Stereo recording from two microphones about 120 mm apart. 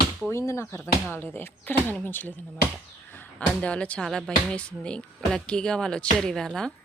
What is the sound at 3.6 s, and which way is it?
A woman's voice, 10° left (ahead or behind).